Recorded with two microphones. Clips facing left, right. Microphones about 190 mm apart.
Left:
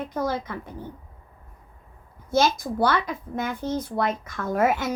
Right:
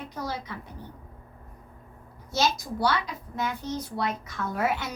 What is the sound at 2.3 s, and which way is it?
Speech, 50° left (ahead or behind).